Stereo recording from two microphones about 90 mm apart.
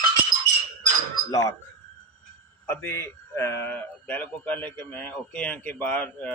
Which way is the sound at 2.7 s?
25° left (ahead or behind).